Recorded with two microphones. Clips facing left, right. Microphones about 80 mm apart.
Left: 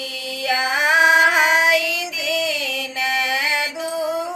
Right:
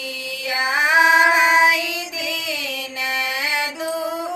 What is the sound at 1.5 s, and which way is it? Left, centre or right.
Child singing, right.